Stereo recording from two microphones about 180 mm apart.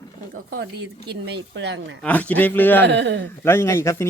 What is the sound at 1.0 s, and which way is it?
Speech, 70° right (ahead or behind).